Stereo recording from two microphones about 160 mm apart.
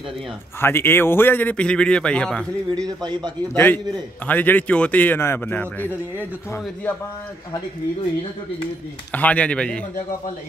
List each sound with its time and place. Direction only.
0.6 s a man's voice: 15° left (ahead or behind)
2.8 s a man's voice: 25° right (ahead or behind)
3.5 s a man's voice: 10° left (ahead or behind)
9.1 s a man's voice: 10° left (ahead or behind)